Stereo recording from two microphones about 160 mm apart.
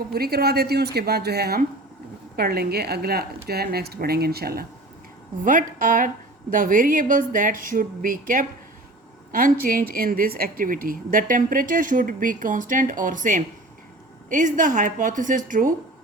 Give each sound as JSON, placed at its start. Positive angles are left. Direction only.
{"t": 0.1, "sound": "a woman's voice", "side_deg": -75}
{"t": 5.4, "sound": "a woman's voice", "side_deg": -55}